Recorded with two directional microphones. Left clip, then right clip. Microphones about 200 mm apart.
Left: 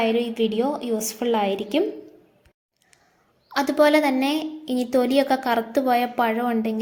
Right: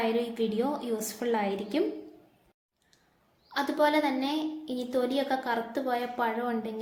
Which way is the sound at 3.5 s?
40° left (ahead or behind).